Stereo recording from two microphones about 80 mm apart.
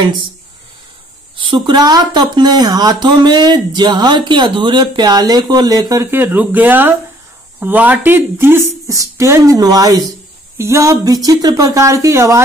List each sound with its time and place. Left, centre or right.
1.3 s speech: right
6.0 s speech: right
8.8 s speech: right
10.6 s speech: right